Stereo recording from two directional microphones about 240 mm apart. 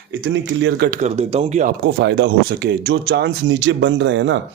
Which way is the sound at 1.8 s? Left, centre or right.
Right.